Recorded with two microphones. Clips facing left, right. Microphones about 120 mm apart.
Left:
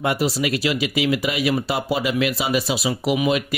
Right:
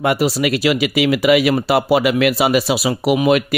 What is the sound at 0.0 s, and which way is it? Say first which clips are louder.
Speech: right 5 dB; 70° right (ahead or behind).